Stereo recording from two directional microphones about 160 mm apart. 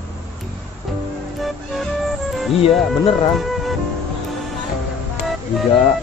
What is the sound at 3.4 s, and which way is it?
Music, centre (ahead or behind).